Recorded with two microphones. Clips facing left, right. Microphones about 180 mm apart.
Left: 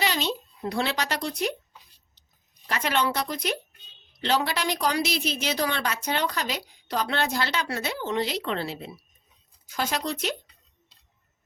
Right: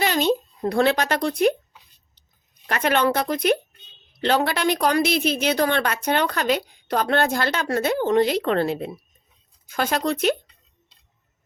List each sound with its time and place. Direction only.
0.0 s speech: 50° right (ahead or behind)
2.6 s a woman's voice: 55° right (ahead or behind)